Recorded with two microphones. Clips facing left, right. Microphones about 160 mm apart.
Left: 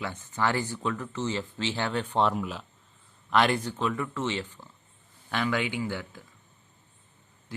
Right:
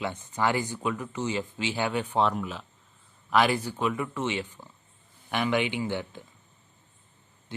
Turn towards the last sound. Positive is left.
turn(degrees=-25)  # may be behind; listen again after turning